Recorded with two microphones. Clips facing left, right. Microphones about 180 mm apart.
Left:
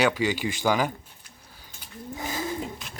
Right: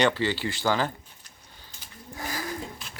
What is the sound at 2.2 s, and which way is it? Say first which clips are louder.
Bird: left 2 dB; 20° left (ahead or behind).